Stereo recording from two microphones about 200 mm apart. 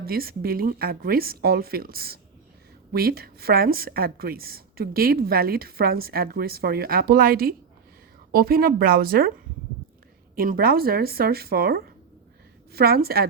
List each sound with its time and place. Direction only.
0.0 s a woman's voice: 50° right (ahead or behind)
10.3 s a woman's voice: 45° right (ahead or behind)